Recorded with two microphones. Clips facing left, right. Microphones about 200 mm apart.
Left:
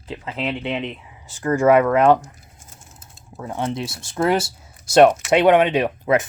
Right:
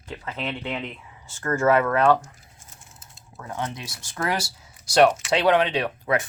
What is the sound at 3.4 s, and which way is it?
Speech, 25° left (ahead or behind).